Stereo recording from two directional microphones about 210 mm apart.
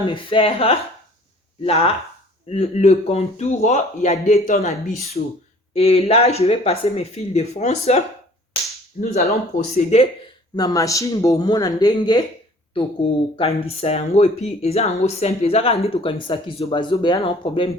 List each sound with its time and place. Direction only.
0.1 s a man's voice: 25° left (ahead or behind)
5.7 s a man's voice: 30° left (ahead or behind)
10.5 s speech: 20° left (ahead or behind)